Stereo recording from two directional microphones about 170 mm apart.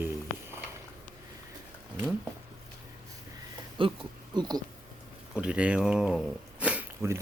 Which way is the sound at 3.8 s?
25° right (ahead or behind).